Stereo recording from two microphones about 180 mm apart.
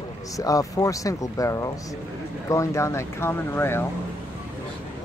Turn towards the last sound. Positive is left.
turn(degrees=15)  # may be behind; listen again after turning